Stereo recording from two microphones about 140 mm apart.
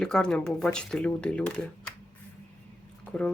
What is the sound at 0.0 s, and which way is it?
Speech, 5° left (ahead or behind).